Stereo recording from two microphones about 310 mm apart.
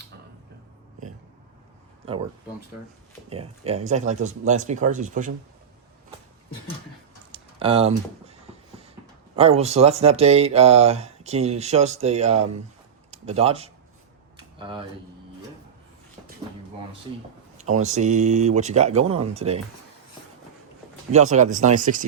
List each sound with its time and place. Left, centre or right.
2.1 s speech: centre
3.2 s speech: centre
7.3 s a sound: centre
9.3 s speech: centre
17.6 s speech: right
21.1 s speech: right